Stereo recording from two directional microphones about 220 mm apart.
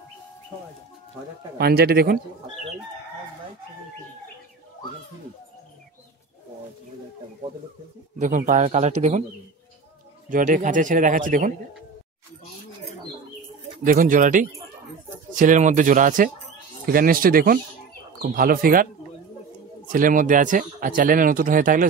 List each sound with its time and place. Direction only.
1.6 s speech: 45° right (ahead or behind)
8.2 s speech: 35° right (ahead or behind)
10.3 s speech: 35° right (ahead or behind)
13.8 s speech: 35° right (ahead or behind)
19.9 s speech: 40° right (ahead or behind)